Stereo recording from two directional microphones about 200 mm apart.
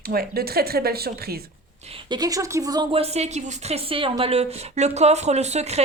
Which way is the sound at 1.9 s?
20° right (ahead or behind).